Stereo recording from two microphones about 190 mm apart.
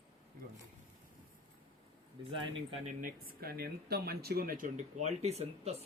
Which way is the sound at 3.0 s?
50° right (ahead or behind).